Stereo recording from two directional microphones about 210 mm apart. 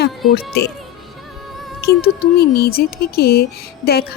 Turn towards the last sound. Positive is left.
turn(degrees=50)  # may be behind; listen again after turning